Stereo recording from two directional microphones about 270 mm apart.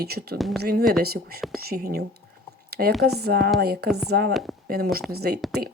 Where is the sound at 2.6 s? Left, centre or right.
Right.